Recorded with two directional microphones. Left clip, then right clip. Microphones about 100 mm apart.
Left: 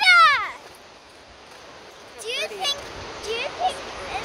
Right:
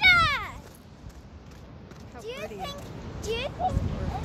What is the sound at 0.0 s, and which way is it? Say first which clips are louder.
Cat: left 6 dB; 5° left (ahead or behind).